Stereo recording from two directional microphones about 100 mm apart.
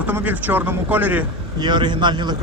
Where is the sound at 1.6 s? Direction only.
50° right (ahead or behind).